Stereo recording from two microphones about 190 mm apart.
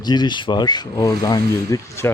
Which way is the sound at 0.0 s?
20° left (ahead or behind).